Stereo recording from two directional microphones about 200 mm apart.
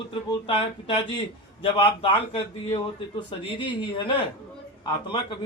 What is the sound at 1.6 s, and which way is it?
A man's voice, 25° left (ahead or behind).